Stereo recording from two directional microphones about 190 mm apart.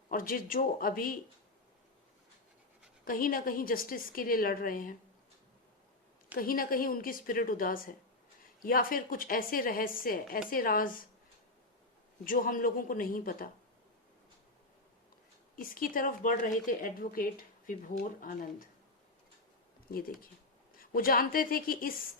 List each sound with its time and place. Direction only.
0.1 s speech: 45° left (ahead or behind)
3.0 s speech: 50° left (ahead or behind)
6.3 s speech: 50° left (ahead or behind)
12.2 s speech: 45° left (ahead or behind)
15.5 s speech: 45° left (ahead or behind)
20.7 s speech: 50° left (ahead or behind)